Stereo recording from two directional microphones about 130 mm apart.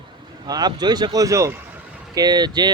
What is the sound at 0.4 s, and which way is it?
Speech, 30° right (ahead or behind).